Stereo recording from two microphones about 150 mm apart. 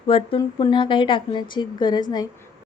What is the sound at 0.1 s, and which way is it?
Speech, 40° left (ahead or behind).